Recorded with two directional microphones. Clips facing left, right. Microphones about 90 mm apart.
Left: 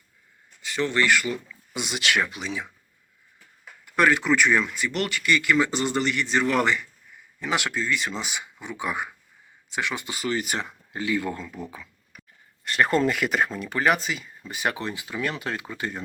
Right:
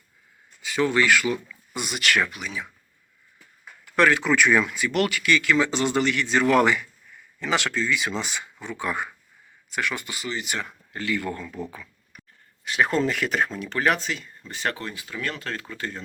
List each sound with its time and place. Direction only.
0.6 s speech: 5° right (ahead or behind)
1.7 s speech: 20° left (ahead or behind)
3.8 s speech: 5° left (ahead or behind)
7.3 s speech: 10° left (ahead or behind)
10.2 s speech: 45° left (ahead or behind)
10.6 s speech: 15° left (ahead or behind)
12.6 s speech: centre (ahead or behind); by 16.0 s 15° left (ahead or behind)